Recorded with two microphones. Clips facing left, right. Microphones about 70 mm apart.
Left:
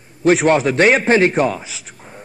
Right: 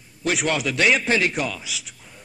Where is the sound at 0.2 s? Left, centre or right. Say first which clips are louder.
Left 10 dB; left.